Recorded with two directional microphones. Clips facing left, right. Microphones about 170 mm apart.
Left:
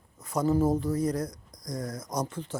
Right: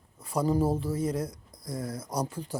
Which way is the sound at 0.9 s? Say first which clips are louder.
Left 1 dB; 25° right (ahead or behind).